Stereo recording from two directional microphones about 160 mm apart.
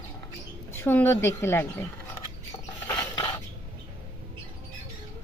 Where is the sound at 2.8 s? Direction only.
25° left (ahead or behind).